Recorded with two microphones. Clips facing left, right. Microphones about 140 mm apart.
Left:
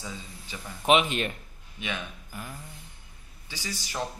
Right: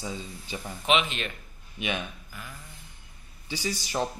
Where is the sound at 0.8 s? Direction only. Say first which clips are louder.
Left 3 dB; 45° left (ahead or behind).